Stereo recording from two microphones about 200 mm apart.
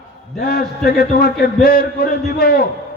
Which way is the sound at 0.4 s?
50° left (ahead or behind).